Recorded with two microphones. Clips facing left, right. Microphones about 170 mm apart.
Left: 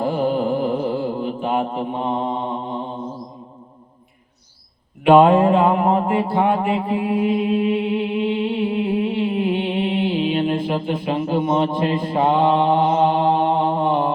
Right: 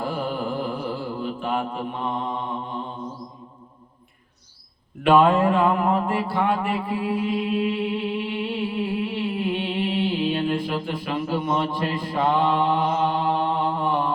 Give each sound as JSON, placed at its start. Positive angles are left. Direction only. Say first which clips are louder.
{"t": 0.0, "sound": "mantra", "louder": "left 7 dB", "side_deg": 25}
{"t": 5.0, "sound": "mantra", "louder": "left 5 dB", "side_deg": 20}